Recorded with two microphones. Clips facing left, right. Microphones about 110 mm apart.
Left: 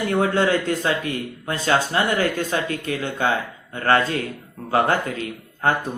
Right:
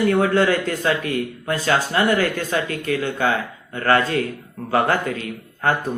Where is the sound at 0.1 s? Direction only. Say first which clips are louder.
Right 2 dB; 25° left (ahead or behind).